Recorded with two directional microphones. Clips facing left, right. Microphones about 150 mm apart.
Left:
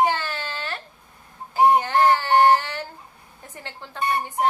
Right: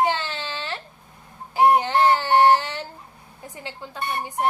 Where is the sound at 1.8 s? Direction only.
15° right (ahead or behind).